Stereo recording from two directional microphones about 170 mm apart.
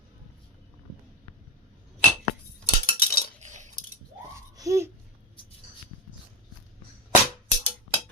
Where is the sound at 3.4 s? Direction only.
45° right (ahead or behind).